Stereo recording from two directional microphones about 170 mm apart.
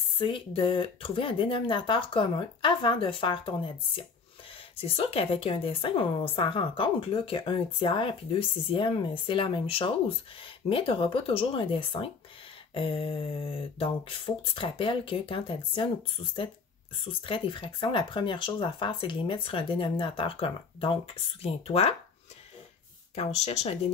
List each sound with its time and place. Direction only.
0.2 s a woman's voice: 30° left (ahead or behind)
17.0 s a woman's voice: 30° left (ahead or behind)
23.1 s a woman's voice: 40° left (ahead or behind)